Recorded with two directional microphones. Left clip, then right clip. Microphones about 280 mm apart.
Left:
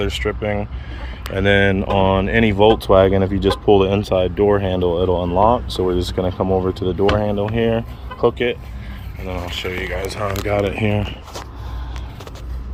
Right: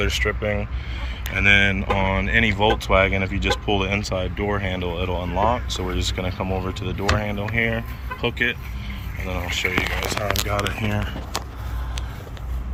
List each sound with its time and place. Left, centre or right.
0.0 s speech: centre